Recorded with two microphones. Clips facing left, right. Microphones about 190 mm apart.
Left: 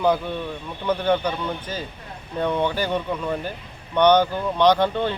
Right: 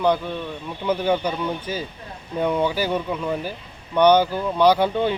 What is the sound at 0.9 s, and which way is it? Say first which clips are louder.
Speech: even; 10° right (ahead or behind).